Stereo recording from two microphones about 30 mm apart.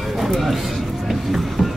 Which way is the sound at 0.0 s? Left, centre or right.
Centre.